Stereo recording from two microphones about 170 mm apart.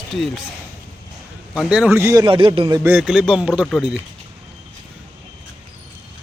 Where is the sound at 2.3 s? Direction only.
30° right (ahead or behind).